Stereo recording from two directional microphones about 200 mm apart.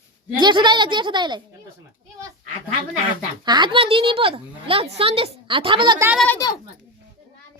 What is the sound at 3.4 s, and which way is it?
A woman's voice, 20° right (ahead or behind).